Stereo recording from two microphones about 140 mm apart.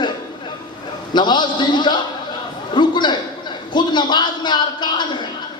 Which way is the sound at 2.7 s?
35° left (ahead or behind).